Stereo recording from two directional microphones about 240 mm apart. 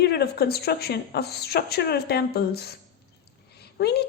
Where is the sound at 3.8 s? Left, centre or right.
Left.